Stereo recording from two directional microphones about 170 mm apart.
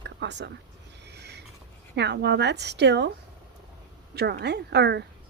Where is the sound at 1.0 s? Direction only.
80° right.